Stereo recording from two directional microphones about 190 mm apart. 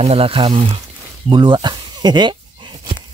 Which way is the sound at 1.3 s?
25° right (ahead or behind).